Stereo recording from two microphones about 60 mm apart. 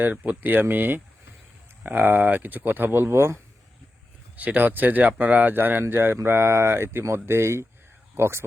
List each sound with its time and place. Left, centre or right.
0.0 s speech: right
4.4 s speech: right